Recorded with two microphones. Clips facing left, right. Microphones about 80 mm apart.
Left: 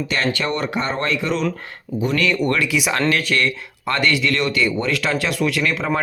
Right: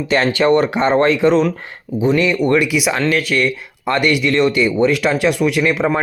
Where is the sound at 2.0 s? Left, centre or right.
Right.